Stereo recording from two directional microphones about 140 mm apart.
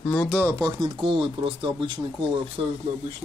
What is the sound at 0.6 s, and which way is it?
Speech, 30° right (ahead or behind).